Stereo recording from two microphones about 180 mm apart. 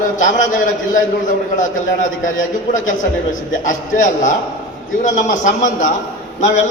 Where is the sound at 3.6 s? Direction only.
45° left (ahead or behind).